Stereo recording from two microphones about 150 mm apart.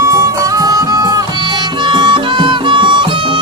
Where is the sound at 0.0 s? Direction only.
20° right (ahead or behind).